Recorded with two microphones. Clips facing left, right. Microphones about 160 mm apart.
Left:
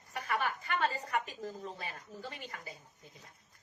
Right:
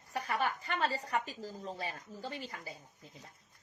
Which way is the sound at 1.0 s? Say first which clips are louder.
Even; 30° right (ahead or behind).